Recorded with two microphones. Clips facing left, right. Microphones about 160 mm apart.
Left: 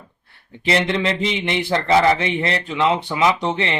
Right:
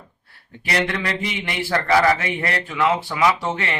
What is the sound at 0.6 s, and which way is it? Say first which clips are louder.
Speech: left 4 dB; 25° left (ahead or behind).